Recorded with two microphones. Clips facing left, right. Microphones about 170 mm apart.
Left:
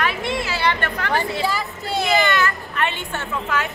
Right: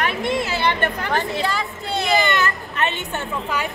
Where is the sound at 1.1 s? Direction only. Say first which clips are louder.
Left 4 dB; 5° left (ahead or behind).